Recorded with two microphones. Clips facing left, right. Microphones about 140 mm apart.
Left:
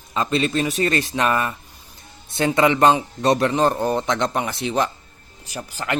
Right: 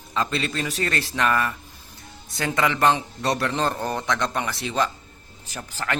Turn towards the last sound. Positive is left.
turn(degrees=15)  # may be behind; listen again after turning